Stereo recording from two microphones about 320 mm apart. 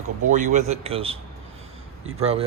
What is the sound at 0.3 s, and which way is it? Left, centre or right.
A man's voice, right.